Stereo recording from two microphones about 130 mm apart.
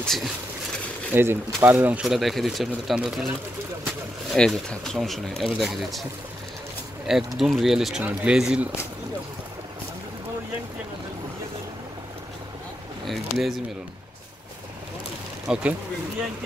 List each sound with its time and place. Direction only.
0.0 s speech: centre (ahead or behind)
1.1 s speech: 15° right (ahead or behind)
2.0 s speech: centre (ahead or behind)
4.3 s speech: 5° left (ahead or behind)
7.1 s speech: centre (ahead or behind)
13.0 s speech: centre (ahead or behind)
15.4 s speech: 10° right (ahead or behind)